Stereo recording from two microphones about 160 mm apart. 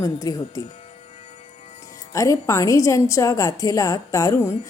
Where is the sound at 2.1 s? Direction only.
20° left (ahead or behind).